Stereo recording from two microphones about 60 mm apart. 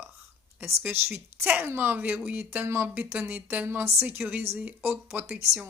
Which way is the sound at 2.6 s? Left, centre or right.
Right.